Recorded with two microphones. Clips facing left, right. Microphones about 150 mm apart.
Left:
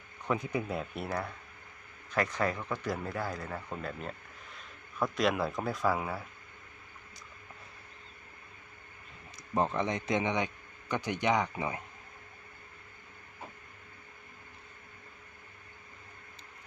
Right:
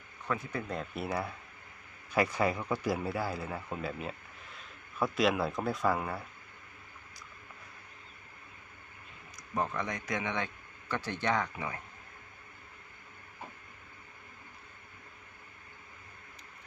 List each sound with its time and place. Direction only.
0.3 s speech: 20° left (ahead or behind)
0.7 s speech: centre (ahead or behind)
9.6 s a man's voice: 25° left (ahead or behind)